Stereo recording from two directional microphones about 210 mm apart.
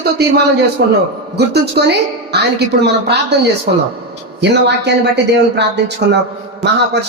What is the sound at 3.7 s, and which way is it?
A man's voice, 50° right (ahead or behind).